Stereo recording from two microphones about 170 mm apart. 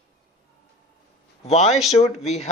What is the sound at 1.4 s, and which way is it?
Speech, 40° left (ahead or behind).